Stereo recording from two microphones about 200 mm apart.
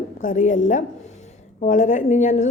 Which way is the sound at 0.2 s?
40° left (ahead or behind).